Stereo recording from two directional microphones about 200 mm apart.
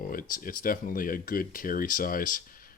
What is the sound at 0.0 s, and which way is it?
Speech, 45° left (ahead or behind).